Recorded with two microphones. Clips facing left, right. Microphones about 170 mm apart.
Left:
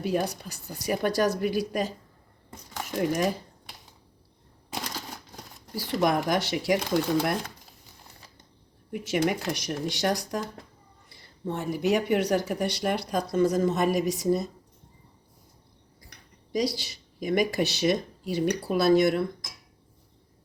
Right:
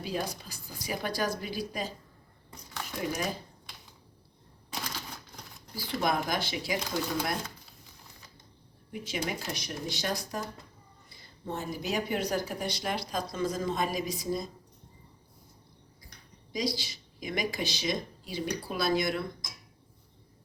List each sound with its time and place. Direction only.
0.0 s speech: 60° left (ahead or behind)
3.0 s speech: 50° left (ahead or behind)
4.7 s typewriter: 45° left (ahead or behind)
6.0 s speech: 75° left (ahead or behind); by 7.5 s 55° left (ahead or behind)
8.9 s speech: 60° left (ahead or behind); by 10.4 s 75° left (ahead or behind)
11.4 s speech: 70° left (ahead or behind)
17.2 s speech: 55° left (ahead or behind)